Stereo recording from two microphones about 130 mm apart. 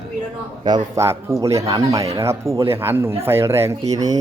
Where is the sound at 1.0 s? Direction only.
25° right (ahead or behind).